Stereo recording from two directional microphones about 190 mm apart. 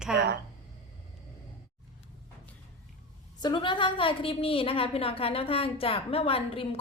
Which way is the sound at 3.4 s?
25° left (ahead or behind).